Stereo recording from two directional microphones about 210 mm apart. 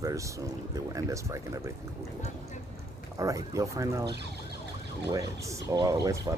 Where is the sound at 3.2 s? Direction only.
15° right (ahead or behind).